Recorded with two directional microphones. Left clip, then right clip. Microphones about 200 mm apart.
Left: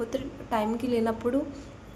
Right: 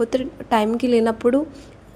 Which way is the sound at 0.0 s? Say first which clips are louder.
Right 10 dB; 35° right (ahead or behind).